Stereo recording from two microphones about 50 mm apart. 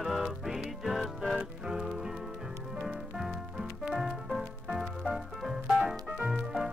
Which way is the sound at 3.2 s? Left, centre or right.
Centre.